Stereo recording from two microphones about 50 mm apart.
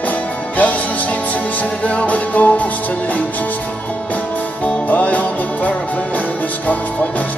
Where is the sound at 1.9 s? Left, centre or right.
Left.